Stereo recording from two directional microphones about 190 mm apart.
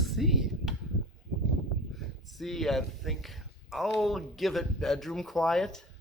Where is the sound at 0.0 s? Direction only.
Centre (ahead or behind).